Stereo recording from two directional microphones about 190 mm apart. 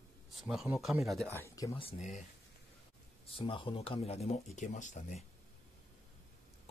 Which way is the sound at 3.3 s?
25° left (ahead or behind).